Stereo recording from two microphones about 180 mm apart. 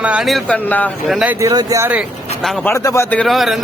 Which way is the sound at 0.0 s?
5° right (ahead or behind).